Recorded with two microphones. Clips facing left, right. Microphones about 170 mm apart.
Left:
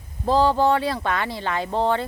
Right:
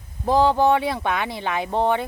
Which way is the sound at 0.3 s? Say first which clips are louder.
Right 1 dB; 15° right (ahead or behind).